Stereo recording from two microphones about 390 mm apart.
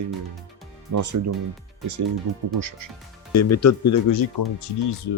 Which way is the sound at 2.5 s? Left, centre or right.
Right.